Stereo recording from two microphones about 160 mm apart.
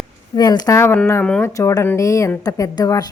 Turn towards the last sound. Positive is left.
turn(degrees=25)  # may be behind; listen again after turning